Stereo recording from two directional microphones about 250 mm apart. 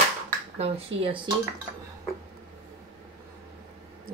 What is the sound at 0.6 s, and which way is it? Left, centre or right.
Speech, right.